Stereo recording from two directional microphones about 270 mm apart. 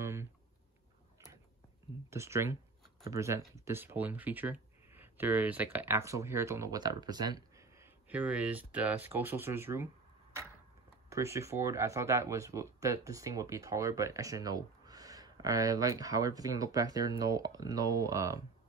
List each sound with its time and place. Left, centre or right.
0.0 s a sound: centre
2.0 s speech: centre
11.1 s speech: centre